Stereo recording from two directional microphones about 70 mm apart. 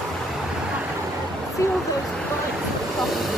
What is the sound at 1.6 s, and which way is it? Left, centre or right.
Vehicle, left.